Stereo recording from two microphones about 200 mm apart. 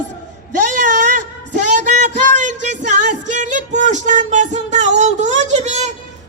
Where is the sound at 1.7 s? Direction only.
40° right (ahead or behind).